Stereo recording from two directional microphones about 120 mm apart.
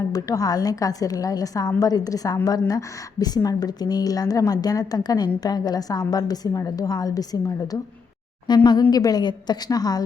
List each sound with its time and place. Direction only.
0.1 s a woman's voice: 30° left (ahead or behind)